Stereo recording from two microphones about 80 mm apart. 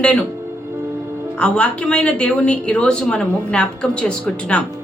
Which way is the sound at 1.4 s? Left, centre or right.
Centre.